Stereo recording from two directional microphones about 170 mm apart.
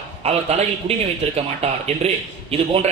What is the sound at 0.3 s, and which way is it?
A man's voice, 40° right (ahead or behind).